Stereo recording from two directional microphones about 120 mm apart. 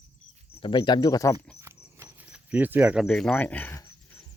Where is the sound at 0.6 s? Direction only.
45° left (ahead or behind).